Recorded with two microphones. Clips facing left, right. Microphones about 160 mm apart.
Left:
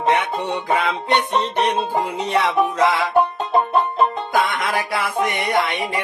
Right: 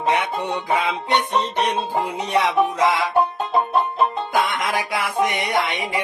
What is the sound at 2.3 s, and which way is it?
Music, 15° right (ahead or behind).